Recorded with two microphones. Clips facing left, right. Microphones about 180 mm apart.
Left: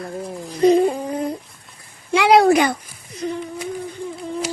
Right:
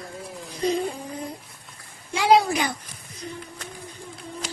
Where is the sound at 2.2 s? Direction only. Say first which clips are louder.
Left 6 dB; 70° left (ahead or behind).